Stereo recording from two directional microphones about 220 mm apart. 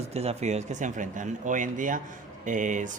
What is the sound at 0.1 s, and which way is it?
A man's voice, 30° right (ahead or behind).